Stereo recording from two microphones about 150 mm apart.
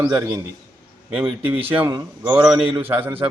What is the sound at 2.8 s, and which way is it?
Speech, 15° right (ahead or behind).